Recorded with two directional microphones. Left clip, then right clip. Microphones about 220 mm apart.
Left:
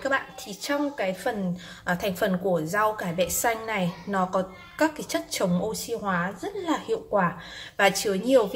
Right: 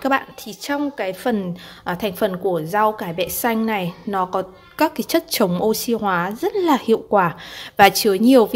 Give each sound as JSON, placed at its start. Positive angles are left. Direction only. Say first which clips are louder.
{"t": 0.0, "sound": "a woman's voice", "louder": "right 6 dB", "side_deg": -50}
{"t": 1.9, "sound": "a woman's voice", "louder": "right 4 dB", "side_deg": -35}